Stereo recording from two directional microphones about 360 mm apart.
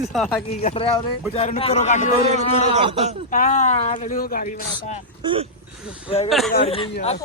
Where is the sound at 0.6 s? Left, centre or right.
Centre.